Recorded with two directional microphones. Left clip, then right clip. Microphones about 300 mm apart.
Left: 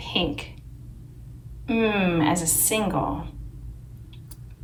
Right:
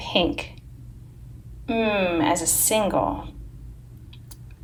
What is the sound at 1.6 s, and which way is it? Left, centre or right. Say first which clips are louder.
A woman's voice: right 1 dB; centre.